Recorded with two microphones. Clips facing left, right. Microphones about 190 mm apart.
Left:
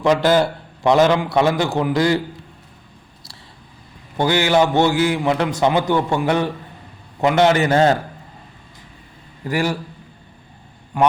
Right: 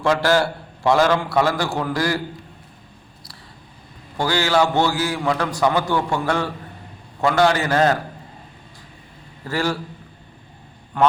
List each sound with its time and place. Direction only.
0.0 s a man's voice: 20° left (ahead or behind)
4.2 s a man's voice: 20° left (ahead or behind)
9.5 s a man's voice: 15° left (ahead or behind)
10.9 s a man's voice: 10° left (ahead or behind)